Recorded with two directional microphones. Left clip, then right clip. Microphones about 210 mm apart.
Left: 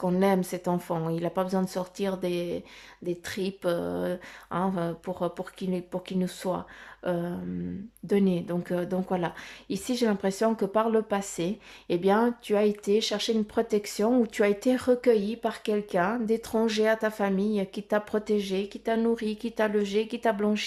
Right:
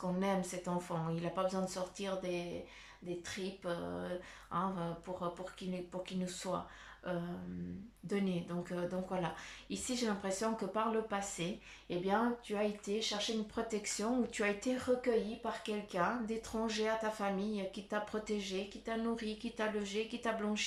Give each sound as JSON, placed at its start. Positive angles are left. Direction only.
{"t": 0.0, "sound": "speech", "side_deg": 45}
{"t": 3.2, "sound": "a sound", "side_deg": 45}
{"t": 4.5, "sound": "speech", "side_deg": 45}